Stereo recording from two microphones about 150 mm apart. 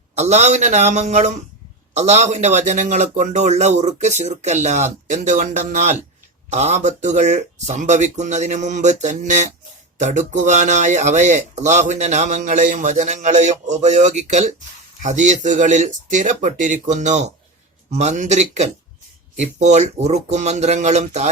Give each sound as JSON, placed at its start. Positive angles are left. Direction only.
{"t": 0.2, "sound": "speech", "side_deg": -50}